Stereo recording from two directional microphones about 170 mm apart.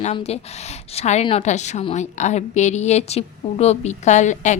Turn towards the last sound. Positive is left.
turn(degrees=45)  # may be behind; listen again after turning